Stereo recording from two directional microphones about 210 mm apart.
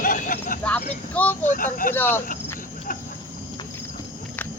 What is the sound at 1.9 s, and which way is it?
Speech, 10° left (ahead or behind).